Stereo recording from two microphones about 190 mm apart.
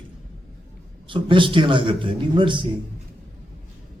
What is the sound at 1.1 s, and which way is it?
A man's voice, 25° right (ahead or behind).